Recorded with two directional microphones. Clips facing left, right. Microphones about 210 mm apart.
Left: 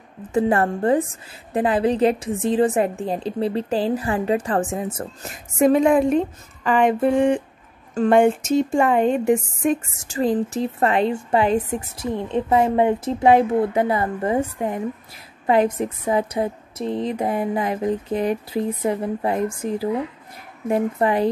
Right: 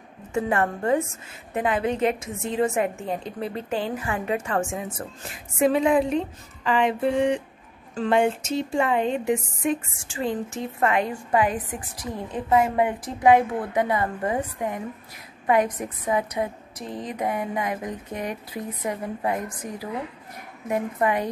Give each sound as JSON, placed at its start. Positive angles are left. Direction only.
{"t": 0.3, "sound": "a woman's voice", "side_deg": 35}